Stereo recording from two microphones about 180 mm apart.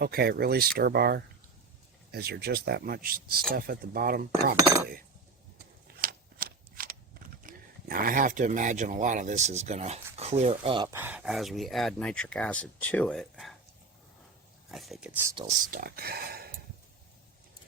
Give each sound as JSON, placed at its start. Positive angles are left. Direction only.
{"t": 0.0, "sound": "speech", "side_deg": -60}
{"t": 4.5, "sound": "speech", "side_deg": -20}
{"t": 5.5, "sound": "shuffling cards", "side_deg": -50}
{"t": 10.8, "sound": "speech", "side_deg": -10}
{"t": 14.7, "sound": "speech", "side_deg": 0}
{"t": 15.4, "sound": "speech", "side_deg": -50}